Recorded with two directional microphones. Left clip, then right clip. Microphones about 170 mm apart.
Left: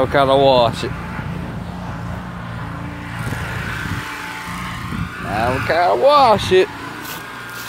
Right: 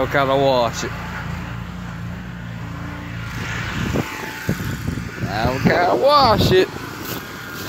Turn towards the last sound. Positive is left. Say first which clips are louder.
# left 2 dB
turn(degrees=0)  # may be behind; listen again after turning